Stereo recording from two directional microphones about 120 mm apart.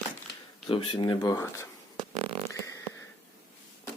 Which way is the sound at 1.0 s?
35° left (ahead or behind).